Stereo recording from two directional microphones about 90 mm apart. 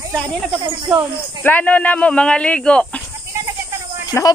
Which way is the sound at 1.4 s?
15° left (ahead or behind).